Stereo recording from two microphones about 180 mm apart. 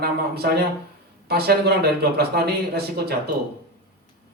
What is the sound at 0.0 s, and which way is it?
A man's voice, 60° right (ahead or behind).